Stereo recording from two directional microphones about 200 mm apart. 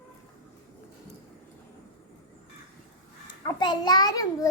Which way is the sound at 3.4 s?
20° left (ahead or behind).